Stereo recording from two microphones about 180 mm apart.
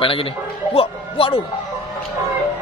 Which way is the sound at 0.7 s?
30° left (ahead or behind).